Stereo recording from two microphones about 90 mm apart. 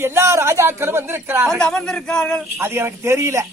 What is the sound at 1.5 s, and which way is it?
Speech, 5° left (ahead or behind).